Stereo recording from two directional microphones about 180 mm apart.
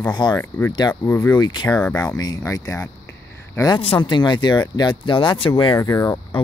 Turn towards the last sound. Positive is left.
turn(degrees=20)  # may be behind; listen again after turning